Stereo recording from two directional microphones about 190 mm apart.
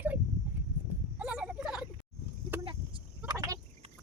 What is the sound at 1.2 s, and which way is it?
Fowl, 5° right (ahead or behind).